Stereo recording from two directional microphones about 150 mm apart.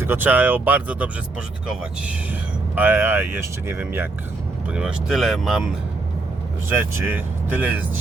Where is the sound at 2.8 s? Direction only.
10° right (ahead or behind).